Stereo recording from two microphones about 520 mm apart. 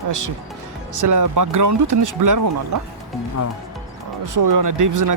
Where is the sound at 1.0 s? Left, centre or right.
Right.